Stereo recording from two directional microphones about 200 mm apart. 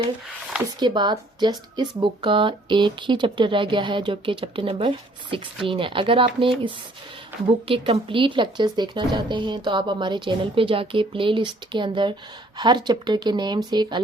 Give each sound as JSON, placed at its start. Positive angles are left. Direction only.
{"t": 0.8, "sound": "a woman's voice", "side_deg": -20}
{"t": 7.7, "sound": "a woman's voice", "side_deg": -25}